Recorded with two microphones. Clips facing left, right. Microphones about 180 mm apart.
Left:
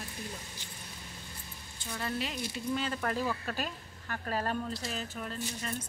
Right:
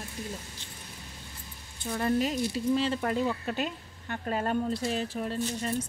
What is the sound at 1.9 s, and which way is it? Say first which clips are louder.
Speech: right 9 dB; 40° right (ahead or behind).